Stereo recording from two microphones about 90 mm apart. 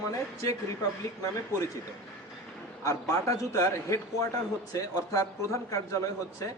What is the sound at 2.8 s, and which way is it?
Speech, 35° left (ahead or behind).